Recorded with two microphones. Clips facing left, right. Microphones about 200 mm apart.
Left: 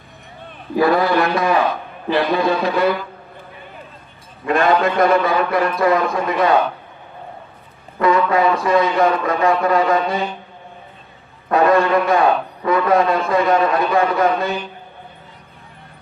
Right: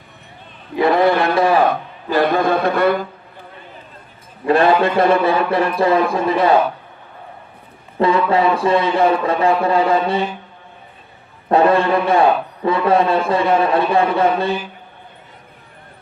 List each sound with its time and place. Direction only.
1.2 s speech: 30° right (ahead or behind)
1.7 s speech: 50° right (ahead or behind)
4.4 s a man's voice: 30° right (ahead or behind)
7.9 s a man's voice: 30° right (ahead or behind)
11.4 s a man's voice: 30° right (ahead or behind)